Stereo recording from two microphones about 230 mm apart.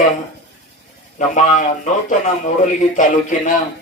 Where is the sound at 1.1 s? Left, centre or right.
Left.